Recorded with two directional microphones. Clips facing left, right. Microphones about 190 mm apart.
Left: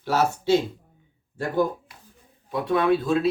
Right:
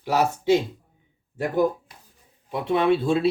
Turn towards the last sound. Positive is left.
turn(degrees=-30)  # may be behind; listen again after turning